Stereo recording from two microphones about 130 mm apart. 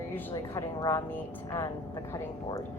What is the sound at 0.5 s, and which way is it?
Speech, 25° left (ahead or behind).